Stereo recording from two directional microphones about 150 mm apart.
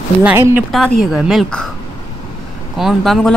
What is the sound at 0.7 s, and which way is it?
Speech, centre (ahead or behind).